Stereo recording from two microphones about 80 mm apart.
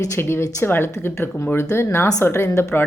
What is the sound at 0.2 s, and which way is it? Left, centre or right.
Speech, left.